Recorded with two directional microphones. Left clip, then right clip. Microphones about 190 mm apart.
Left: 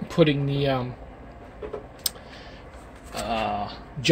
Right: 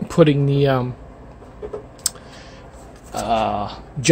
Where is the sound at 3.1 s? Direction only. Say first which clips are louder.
Right 7 dB; 35° right (ahead or behind).